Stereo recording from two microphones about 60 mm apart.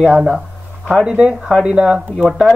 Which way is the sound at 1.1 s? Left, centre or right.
Centre.